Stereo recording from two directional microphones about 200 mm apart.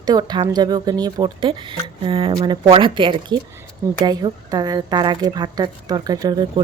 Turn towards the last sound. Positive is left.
turn(degrees=-20)  # may be behind; listen again after turning